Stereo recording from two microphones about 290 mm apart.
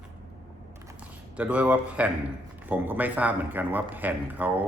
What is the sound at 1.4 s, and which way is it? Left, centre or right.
Speech, centre.